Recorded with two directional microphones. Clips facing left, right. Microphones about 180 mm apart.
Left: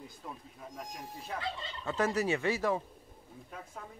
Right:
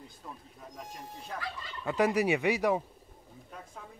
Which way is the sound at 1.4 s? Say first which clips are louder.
Left 2 dB; 25° left (ahead or behind).